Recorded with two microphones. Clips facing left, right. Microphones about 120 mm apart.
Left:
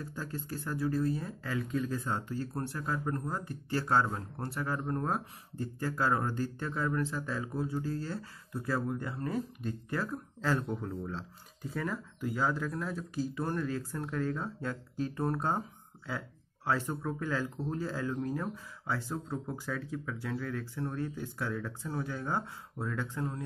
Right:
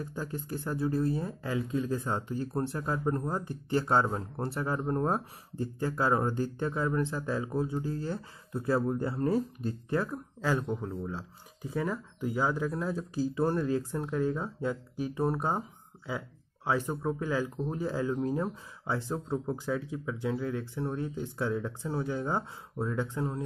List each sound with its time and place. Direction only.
0.0 s speech: 20° right (ahead or behind)
10.1 s speech: 10° right (ahead or behind)
12.8 s speech: 25° right (ahead or behind)